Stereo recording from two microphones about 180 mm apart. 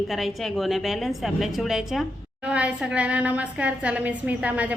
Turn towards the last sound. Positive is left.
turn(degrees=-10)  # may be behind; listen again after turning